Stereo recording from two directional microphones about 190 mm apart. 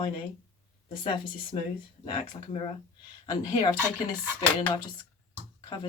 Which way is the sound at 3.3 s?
20° left (ahead or behind).